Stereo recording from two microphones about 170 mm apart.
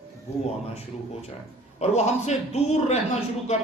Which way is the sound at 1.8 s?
40° left (ahead or behind).